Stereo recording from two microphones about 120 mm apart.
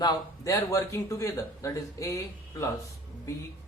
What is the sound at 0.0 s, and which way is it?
Speech, 30° left (ahead or behind).